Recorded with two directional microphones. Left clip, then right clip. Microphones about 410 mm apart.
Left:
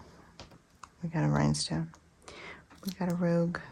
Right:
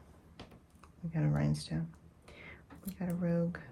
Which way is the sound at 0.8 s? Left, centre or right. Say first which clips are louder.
Left 6 dB; centre.